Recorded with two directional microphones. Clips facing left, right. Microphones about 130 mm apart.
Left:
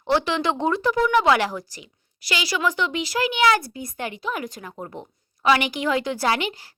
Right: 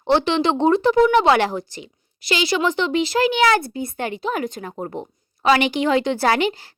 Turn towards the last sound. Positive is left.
turn(degrees=-30)  # may be behind; listen again after turning